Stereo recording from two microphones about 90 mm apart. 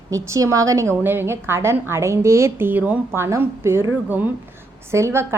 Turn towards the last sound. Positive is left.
turn(degrees=-30)  # may be behind; listen again after turning